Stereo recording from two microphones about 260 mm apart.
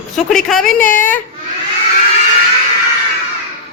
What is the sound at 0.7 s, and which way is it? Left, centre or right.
Speech, left.